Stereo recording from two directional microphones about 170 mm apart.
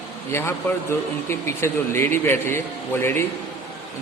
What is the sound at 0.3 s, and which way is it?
Speech, 15° left (ahead or behind).